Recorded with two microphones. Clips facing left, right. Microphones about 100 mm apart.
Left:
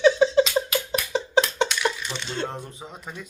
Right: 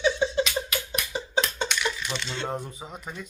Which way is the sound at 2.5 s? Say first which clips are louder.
Right 3 dB; centre (ahead or behind).